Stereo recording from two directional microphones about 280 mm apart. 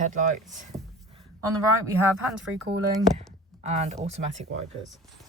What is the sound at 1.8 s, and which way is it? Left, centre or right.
Speech, centre.